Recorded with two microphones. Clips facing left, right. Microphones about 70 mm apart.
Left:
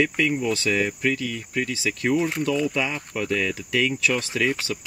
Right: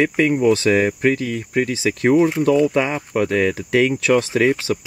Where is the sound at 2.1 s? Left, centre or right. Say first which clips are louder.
Right 9 dB; centre.